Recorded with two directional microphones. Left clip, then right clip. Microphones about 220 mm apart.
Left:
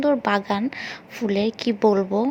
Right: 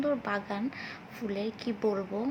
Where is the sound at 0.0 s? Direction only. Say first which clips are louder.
Left 10 dB; 30° left (ahead or behind).